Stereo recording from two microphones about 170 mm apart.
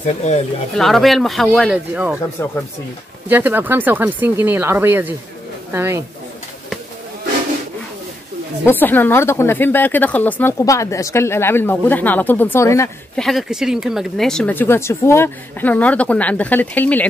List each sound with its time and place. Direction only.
0.0 s speech: 45° left (ahead or behind)
0.7 s speech: centre (ahead or behind)
3.3 s speech: 10° right (ahead or behind)
8.6 s a woman's voice: 10° left (ahead or behind)
13.1 s a woman's voice: centre (ahead or behind)